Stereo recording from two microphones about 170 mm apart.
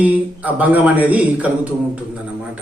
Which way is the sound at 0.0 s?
10° right (ahead or behind).